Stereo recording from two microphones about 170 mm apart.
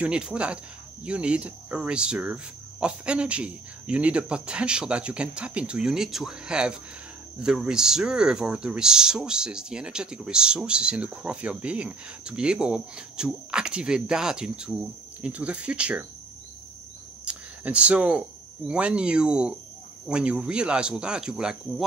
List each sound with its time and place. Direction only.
0.0 s speech: 5° right (ahead or behind)
1.0 s cricket: 5° right (ahead or behind)
7.3 s speech: 5° right (ahead or behind)
15.2 s cricket: 5° right (ahead or behind)
17.2 s a sound: 5° right (ahead or behind)
18.7 s speech: 5° right (ahead or behind)